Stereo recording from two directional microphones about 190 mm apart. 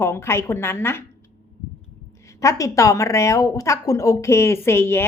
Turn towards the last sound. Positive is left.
turn(degrees=15)  # may be behind; listen again after turning